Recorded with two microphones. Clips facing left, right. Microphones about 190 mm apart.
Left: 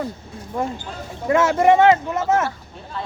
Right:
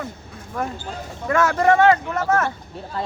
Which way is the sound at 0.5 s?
25° left (ahead or behind).